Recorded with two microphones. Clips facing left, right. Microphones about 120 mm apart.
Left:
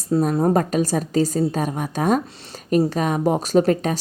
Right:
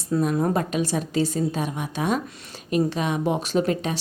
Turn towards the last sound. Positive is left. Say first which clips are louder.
# left 5 dB
turn(degrees=45)  # may be behind; listen again after turning